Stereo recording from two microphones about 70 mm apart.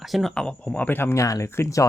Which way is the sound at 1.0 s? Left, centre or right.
Left.